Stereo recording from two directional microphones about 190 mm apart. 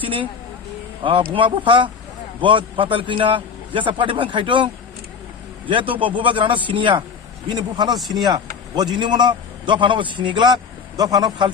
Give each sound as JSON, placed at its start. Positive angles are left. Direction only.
{"t": 0.0, "sound": "a man's voice", "side_deg": -25}